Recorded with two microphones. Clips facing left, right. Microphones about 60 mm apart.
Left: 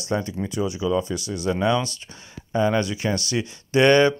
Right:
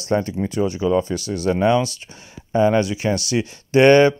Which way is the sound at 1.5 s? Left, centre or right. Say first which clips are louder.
Right 5 dB; right.